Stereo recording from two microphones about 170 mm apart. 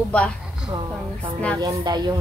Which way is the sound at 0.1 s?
5° left (ahead or behind).